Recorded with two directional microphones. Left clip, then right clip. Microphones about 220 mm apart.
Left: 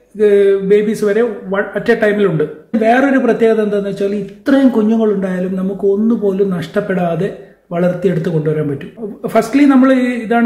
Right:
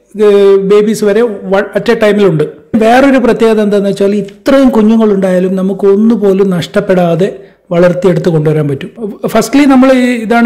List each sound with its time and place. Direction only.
0.2 s a man's voice: 35° right (ahead or behind)